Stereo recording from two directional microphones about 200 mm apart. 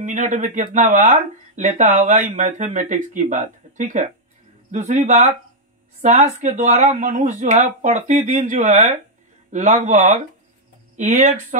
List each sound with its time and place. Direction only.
0.0 s speech: 40° right (ahead or behind)